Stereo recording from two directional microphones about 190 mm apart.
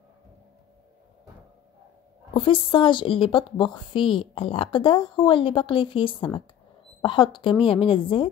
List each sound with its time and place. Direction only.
2.3 s speech: 30° left (ahead or behind)